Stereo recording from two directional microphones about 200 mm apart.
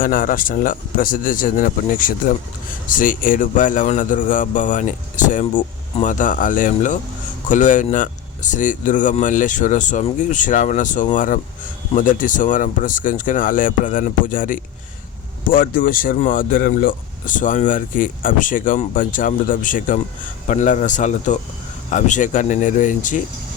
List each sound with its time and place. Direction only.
0.0 s speech: 45° left (ahead or behind)